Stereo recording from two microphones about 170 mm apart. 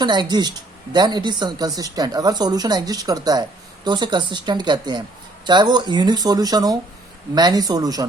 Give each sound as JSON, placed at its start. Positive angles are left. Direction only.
{"t": 0.0, "sound": "speech", "side_deg": -25}